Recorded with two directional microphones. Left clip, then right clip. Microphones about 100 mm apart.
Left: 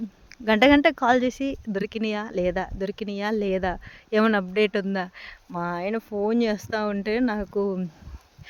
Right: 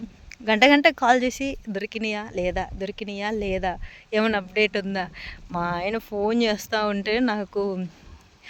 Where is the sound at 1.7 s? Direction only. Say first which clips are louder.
Left 1 dB; 45° left (ahead or behind).